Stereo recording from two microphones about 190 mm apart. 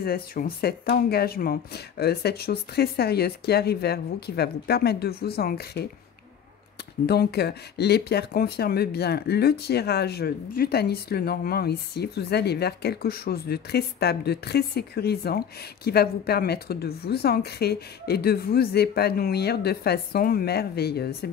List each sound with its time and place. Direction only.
0.0 s speech: 50° left (ahead or behind)
7.1 s speech: 60° left (ahead or behind)